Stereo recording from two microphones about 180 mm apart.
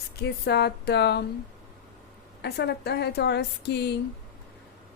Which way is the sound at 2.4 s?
70° left (ahead or behind).